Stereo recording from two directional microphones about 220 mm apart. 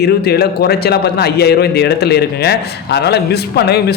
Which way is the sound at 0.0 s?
45° left (ahead or behind).